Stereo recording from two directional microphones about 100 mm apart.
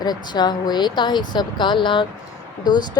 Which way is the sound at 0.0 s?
45° left (ahead or behind).